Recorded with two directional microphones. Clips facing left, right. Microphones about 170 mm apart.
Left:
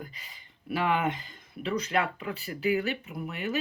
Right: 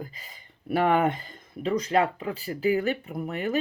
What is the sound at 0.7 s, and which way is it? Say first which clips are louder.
Speech: right 5 dB; 50° right (ahead or behind).